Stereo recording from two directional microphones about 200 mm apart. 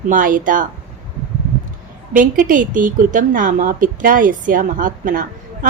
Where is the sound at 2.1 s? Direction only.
40° right (ahead or behind).